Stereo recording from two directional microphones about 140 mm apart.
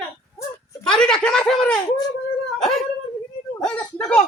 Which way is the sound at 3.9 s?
10° left (ahead or behind).